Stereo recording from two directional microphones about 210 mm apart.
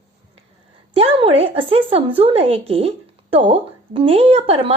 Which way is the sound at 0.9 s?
25° right (ahead or behind).